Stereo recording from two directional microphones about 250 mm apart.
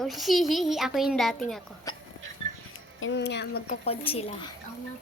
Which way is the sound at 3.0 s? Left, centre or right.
Left.